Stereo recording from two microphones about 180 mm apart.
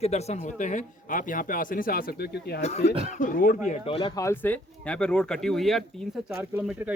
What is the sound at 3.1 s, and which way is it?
Speech, 45° left (ahead or behind).